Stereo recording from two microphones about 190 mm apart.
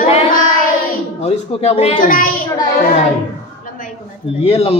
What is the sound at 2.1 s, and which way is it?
Speech, 45° left (ahead or behind).